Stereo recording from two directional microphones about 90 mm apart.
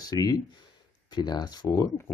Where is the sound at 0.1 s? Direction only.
45° left (ahead or behind).